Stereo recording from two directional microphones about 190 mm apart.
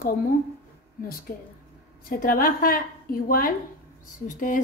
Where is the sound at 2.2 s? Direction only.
50° left (ahead or behind).